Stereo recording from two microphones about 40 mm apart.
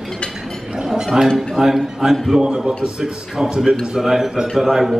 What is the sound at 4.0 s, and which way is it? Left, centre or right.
Speech, centre.